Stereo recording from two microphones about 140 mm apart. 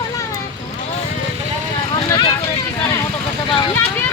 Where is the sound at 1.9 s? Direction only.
30° left (ahead or behind).